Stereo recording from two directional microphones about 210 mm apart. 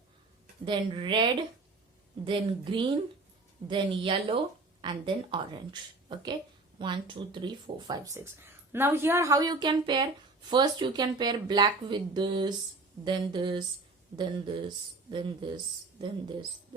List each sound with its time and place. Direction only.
0.6 s a woman's voice: 25° right (ahead or behind)